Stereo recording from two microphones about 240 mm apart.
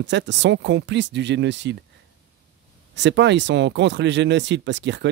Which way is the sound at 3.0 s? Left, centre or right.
Right.